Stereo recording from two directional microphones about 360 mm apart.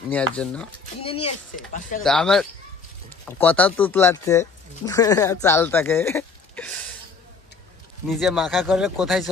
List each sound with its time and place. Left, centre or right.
0.1 s speech: centre
1.0 s a sound: centre
1.7 s speech: left
2.0 s speech: centre
8.1 s speech: centre